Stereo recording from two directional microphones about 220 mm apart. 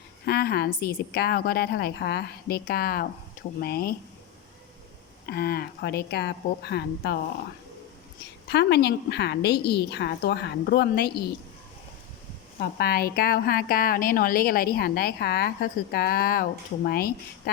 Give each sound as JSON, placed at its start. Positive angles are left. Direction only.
{"t": 0.3, "sound": "a woman's voice", "side_deg": 45}
{"t": 5.2, "sound": "a woman's voice", "side_deg": 45}
{"t": 8.4, "sound": "a woman's voice", "side_deg": 50}
{"t": 12.5, "sound": "a woman's voice", "side_deg": 45}